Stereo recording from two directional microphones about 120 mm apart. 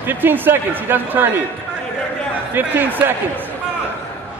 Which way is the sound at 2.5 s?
15° right (ahead or behind).